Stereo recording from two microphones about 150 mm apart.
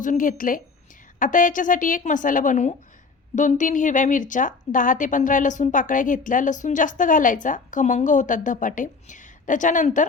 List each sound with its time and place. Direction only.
0.0 s a woman's voice: 60° left (ahead or behind)